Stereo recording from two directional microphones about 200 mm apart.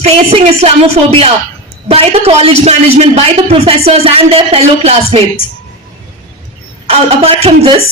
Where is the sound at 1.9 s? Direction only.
30° right (ahead or behind).